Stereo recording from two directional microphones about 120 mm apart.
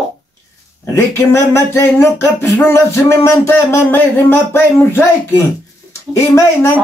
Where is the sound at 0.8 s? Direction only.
20° left (ahead or behind).